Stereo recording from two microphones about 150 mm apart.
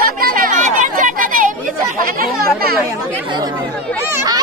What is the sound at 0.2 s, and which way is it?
Children playing, 65° right (ahead or behind).